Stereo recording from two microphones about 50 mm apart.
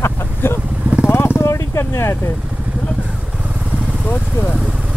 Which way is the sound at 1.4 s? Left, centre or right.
Left.